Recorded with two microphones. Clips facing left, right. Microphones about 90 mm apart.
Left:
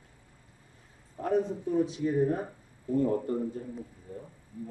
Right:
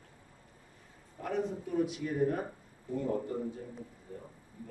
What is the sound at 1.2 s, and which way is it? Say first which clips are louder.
Speech: left 6 dB; 30° left (ahead or behind).